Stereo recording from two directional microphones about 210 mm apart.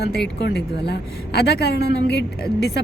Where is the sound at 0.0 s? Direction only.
50° left (ahead or behind).